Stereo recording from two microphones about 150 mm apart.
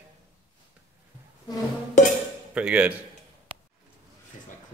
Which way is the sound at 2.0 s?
55° left (ahead or behind).